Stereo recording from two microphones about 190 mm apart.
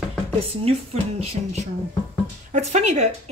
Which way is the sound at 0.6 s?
35° right (ahead or behind).